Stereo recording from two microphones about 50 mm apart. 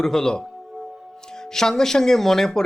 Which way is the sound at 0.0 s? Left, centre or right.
Centre.